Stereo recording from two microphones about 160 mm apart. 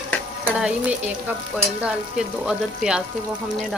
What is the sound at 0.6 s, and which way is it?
Stir, 10° right (ahead or behind).